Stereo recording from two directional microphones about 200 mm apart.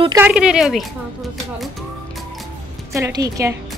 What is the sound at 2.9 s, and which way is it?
Speech, 15° right (ahead or behind).